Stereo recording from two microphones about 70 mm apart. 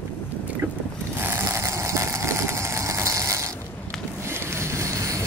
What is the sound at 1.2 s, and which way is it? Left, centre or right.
Vehicle, right.